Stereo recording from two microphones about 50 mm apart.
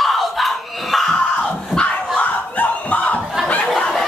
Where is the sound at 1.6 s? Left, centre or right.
Centre.